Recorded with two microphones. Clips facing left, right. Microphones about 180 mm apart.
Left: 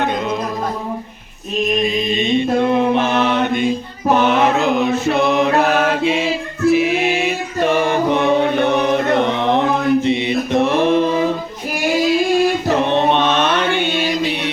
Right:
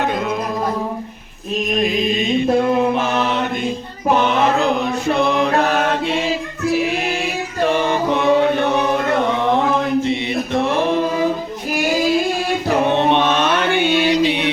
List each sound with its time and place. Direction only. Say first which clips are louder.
2.0 s mantra: even; 5° right (ahead or behind)
4.5 s chant: left 2 dB; 5° left (ahead or behind)
6.7 s choir: left 4 dB; centre (ahead or behind)
8.1 s music: right 2 dB; 20° left (ahead or behind)
9.2 s mantra: left 1 dB; 20° left (ahead or behind)
13.1 s mantra: even; 10° right (ahead or behind)